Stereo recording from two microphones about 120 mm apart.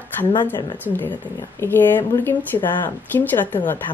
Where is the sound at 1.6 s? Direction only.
20° left (ahead or behind).